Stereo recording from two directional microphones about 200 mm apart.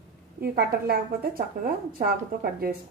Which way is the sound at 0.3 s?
50° right (ahead or behind).